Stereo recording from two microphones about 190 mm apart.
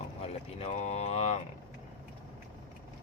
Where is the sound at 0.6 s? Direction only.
35° left (ahead or behind).